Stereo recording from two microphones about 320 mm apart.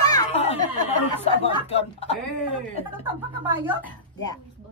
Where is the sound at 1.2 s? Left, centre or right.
Centre.